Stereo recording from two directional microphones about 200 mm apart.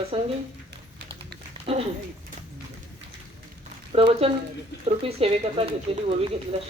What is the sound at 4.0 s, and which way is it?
Speech, 30° right (ahead or behind).